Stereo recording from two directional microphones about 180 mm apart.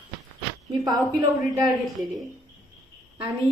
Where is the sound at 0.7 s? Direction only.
25° right (ahead or behind).